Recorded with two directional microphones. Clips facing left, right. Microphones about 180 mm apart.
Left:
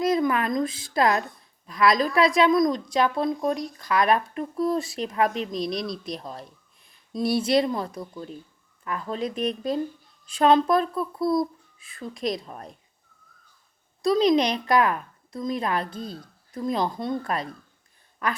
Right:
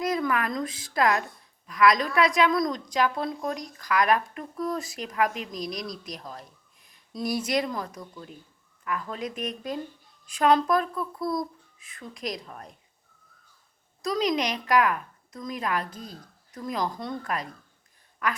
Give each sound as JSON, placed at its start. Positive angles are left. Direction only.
{"t": 0.0, "sound": "a woman's voice", "side_deg": 25}
{"t": 14.0, "sound": "a woman's voice", "side_deg": 30}